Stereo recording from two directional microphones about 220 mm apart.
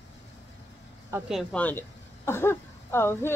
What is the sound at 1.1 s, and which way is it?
Speech, centre (ahead or behind).